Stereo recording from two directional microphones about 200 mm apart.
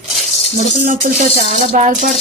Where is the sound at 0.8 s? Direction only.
45° right (ahead or behind).